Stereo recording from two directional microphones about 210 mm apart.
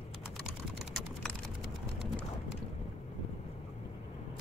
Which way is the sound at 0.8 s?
Centre (ahead or behind).